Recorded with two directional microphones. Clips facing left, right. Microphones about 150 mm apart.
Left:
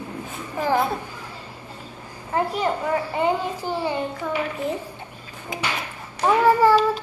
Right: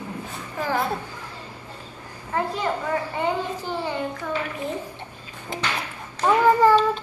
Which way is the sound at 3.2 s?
10° left (ahead or behind).